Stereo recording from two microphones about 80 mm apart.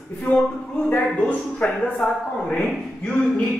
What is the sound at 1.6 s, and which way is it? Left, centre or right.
A man's voice, centre.